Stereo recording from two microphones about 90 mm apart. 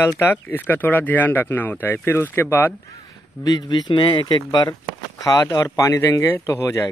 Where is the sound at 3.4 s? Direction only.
50° left (ahead or behind).